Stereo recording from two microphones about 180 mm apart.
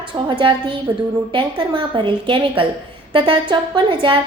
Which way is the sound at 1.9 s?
30° right (ahead or behind).